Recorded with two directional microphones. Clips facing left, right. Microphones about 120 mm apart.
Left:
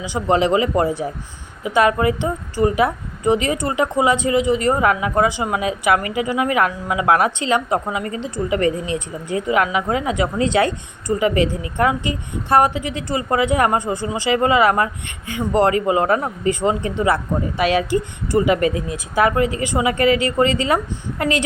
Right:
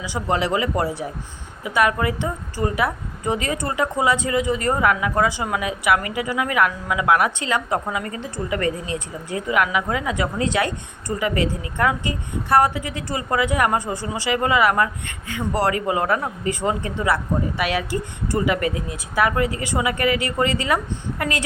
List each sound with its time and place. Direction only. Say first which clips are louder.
0.0 s a woman's voice: left 5 dB; 25° left (ahead or behind)